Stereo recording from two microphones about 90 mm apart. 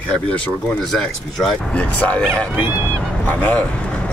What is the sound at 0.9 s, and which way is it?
Speech, centre (ahead or behind).